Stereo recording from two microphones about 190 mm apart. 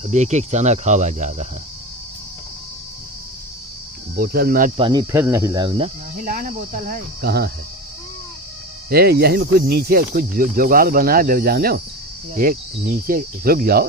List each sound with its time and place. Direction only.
0.0 s speech: 40° right (ahead or behind)
4.1 s speech: 50° right (ahead or behind)
4.7 s speech: 25° right (ahead or behind)
5.1 s speech: 15° right (ahead or behind)
6.2 s speech: 45° right (ahead or behind)
8.9 s speech: 55° right (ahead or behind)